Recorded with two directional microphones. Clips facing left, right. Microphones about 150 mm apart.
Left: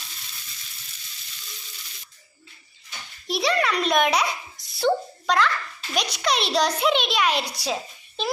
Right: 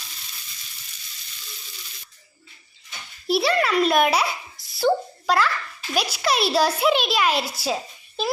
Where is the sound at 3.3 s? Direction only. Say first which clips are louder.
Right 3 dB; 5° right (ahead or behind).